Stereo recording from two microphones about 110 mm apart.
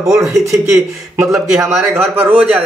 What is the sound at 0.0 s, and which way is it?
Speech, 30° right (ahead or behind).